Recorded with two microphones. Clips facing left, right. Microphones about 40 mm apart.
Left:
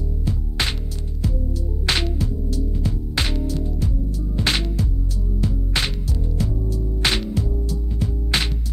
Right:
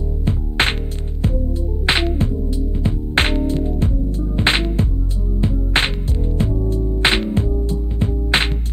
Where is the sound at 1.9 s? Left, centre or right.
Right.